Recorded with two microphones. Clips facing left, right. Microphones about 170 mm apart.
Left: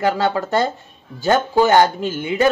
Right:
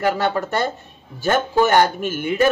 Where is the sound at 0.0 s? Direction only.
20° left (ahead or behind).